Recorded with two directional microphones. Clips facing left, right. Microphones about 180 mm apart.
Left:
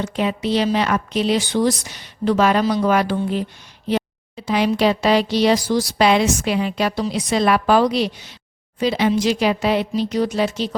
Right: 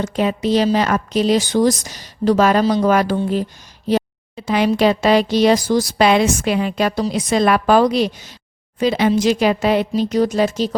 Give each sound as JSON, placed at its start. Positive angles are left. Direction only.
{"t": 0.0, "sound": "a woman's voice", "side_deg": -40}
{"t": 4.4, "sound": "speech", "side_deg": -50}